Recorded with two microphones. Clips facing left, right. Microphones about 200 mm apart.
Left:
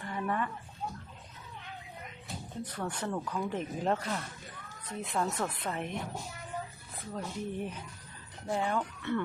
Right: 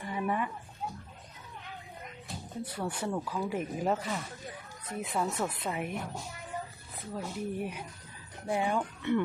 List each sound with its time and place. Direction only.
0.0 s a sound: 10° right (ahead or behind)
2.3 s speech: 10° right (ahead or behind)
7.1 s speech: 5° right (ahead or behind)